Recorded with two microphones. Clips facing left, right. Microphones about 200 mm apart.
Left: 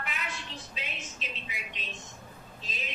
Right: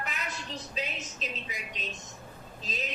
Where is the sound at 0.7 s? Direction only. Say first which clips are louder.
Right 5 dB; 40° right (ahead or behind).